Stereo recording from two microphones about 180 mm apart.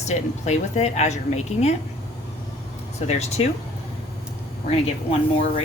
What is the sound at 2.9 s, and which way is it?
Speech, 35° left (ahead or behind).